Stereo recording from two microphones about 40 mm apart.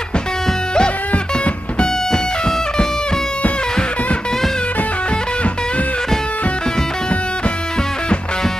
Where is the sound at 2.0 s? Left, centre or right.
Centre.